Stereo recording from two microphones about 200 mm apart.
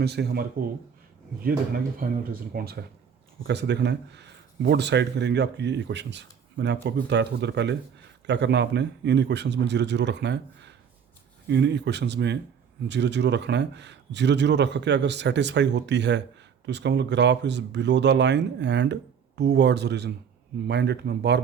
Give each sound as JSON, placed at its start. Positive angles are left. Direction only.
{"t": 0.0, "sound": "speech", "side_deg": -55}